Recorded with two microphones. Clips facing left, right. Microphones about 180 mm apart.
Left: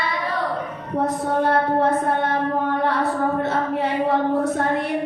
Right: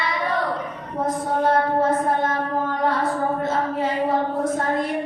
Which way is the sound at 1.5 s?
65° left (ahead or behind).